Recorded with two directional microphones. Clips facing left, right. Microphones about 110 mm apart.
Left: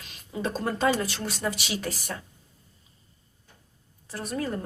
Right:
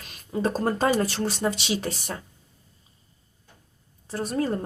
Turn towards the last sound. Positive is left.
turn(degrees=-30)  # may be behind; listen again after turning